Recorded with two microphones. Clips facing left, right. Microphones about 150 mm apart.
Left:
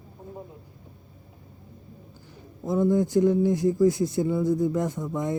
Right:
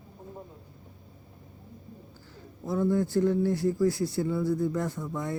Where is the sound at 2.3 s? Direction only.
20° left (ahead or behind).